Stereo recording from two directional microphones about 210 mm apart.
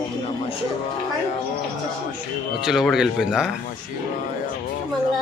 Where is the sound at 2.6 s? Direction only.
Centre (ahead or behind).